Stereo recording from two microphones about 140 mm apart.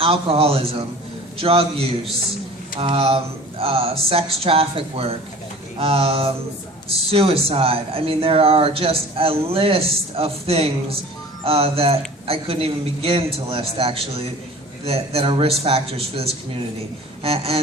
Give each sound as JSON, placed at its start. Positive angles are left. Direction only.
{"t": 0.0, "sound": "speech", "side_deg": -45}